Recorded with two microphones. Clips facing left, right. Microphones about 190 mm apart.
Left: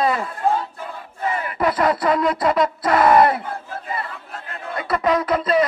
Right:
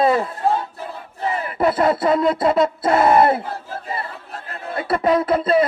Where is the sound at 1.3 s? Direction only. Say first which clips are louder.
Right 2 dB; 30° right (ahead or behind).